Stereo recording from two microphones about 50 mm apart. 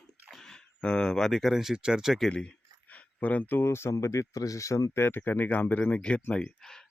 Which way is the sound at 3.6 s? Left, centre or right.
Left.